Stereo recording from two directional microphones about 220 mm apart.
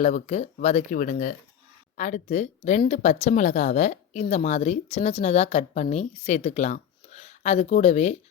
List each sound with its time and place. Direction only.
0.0 s speech: 30° left (ahead or behind)